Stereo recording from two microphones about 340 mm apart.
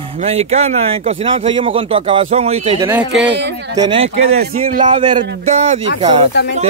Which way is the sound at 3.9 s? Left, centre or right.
Centre.